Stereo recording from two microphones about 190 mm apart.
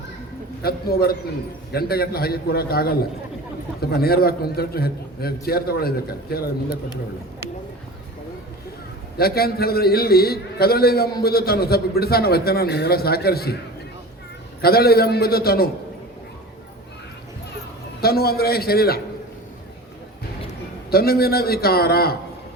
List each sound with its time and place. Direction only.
0.6 s a man's voice: 55° left (ahead or behind)
9.1 s a man's voice: 55° left (ahead or behind)
14.6 s a man's voice: 55° left (ahead or behind)
18.0 s a man's voice: 55° left (ahead or behind)
20.9 s a man's voice: 55° left (ahead or behind)